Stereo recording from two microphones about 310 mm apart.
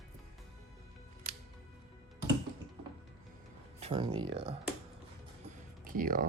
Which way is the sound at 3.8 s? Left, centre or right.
Centre.